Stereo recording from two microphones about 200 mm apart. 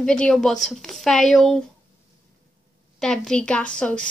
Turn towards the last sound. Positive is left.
turn(degrees=5)  # may be behind; listen again after turning